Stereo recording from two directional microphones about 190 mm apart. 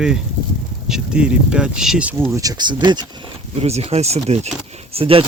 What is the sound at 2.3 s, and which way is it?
Speech, 20° right (ahead or behind).